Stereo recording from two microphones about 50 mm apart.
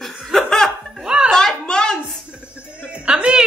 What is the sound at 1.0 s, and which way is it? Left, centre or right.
Music, centre.